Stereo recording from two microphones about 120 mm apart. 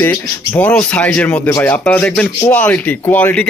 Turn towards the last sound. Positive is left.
turn(degrees=10)  # may be behind; listen again after turning